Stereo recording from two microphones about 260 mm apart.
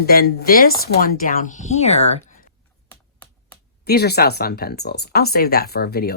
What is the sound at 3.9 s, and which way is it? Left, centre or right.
Speech, left.